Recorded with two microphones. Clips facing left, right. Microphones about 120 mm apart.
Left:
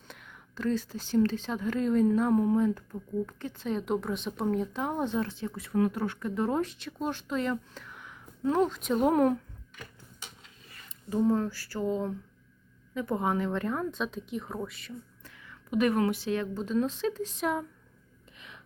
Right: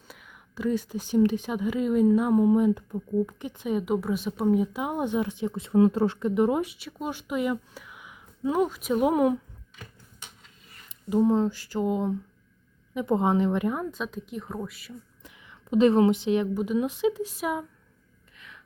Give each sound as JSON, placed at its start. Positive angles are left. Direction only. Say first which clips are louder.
{"t": 0.1, "sound": "speech", "louder": "right 1 dB", "side_deg": -10}
{"t": 10.8, "sound": "speech", "louder": "right 4 dB", "side_deg": -15}
{"t": 15.2, "sound": "a woman's voice", "louder": "right 1 dB", "side_deg": -20}
{"t": 18.3, "sound": "gasp", "louder": "even", "side_deg": 20}